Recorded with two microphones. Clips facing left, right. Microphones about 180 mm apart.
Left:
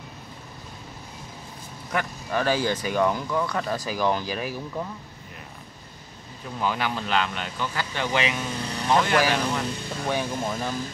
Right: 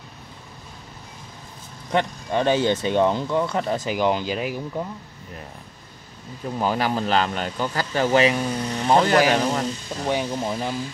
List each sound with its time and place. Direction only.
1.9 s speech: 25° right (ahead or behind)
6.6 s speech: 40° right (ahead or behind)
10.0 s speech: 15° right (ahead or behind)